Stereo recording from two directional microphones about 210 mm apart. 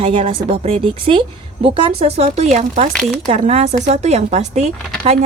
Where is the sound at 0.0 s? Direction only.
25° right (ahead or behind).